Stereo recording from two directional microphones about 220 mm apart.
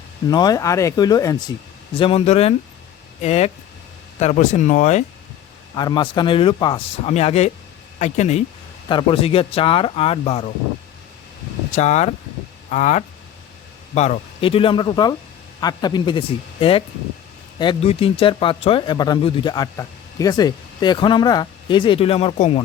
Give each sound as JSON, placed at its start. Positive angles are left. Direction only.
{"t": 0.3, "sound": "speech", "side_deg": 15}
{"t": 5.7, "sound": "speech", "side_deg": 20}
{"t": 11.7, "sound": "speech", "side_deg": 30}